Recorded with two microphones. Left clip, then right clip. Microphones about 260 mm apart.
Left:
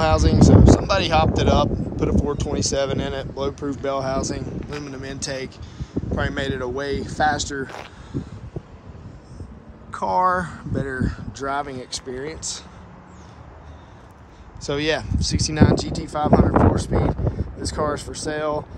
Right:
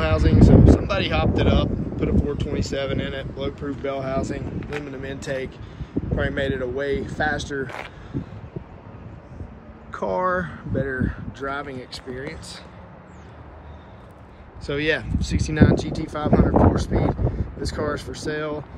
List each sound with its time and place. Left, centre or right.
0.0 s speech: centre
9.8 s speech: centre
14.6 s speech: centre